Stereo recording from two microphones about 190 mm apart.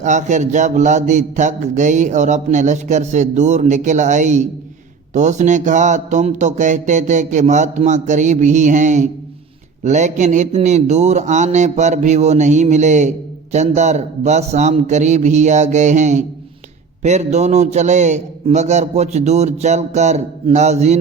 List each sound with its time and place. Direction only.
0.0 s speech: 40° right (ahead or behind)